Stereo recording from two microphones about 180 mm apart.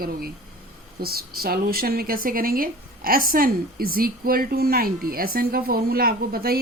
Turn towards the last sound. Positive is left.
turn(degrees=-55)  # may be behind; listen again after turning